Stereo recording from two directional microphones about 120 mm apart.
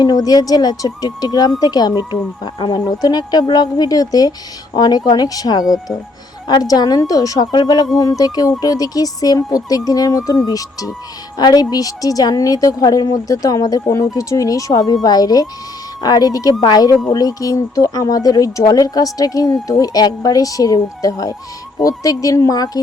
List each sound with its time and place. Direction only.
0.0 s a woman's voice: 35° left (ahead or behind)
5.6 s speech: centre (ahead or behind)
6.5 s a woman's voice: 35° left (ahead or behind)